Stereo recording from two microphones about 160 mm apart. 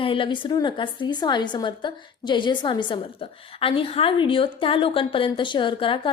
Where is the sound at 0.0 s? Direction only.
35° left (ahead or behind).